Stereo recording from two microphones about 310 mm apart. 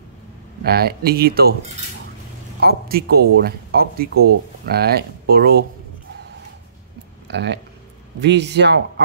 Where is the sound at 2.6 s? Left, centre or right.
Right.